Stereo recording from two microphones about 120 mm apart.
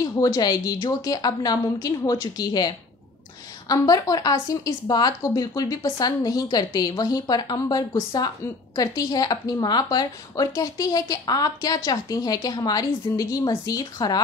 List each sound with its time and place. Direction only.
0.0 s speech: 30° left (ahead or behind)